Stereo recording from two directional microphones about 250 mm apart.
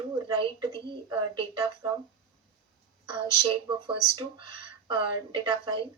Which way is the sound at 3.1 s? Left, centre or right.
Centre.